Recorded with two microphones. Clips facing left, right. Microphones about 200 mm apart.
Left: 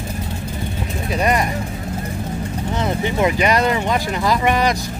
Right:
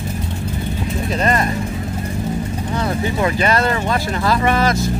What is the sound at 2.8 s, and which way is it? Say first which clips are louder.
Speech: left 1 dB; 20° left (ahead or behind).